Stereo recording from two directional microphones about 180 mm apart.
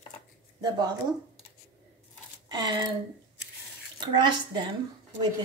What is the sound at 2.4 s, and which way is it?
Speech, 25° right (ahead or behind).